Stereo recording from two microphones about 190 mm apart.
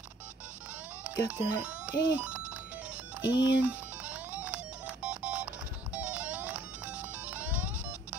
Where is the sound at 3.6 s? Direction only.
5° right (ahead or behind).